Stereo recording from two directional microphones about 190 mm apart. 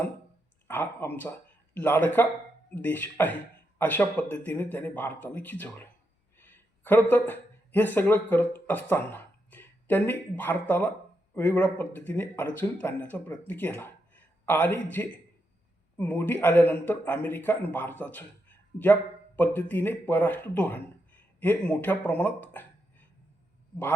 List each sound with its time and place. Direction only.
0.7 s a man's voice: 10° left (ahead or behind)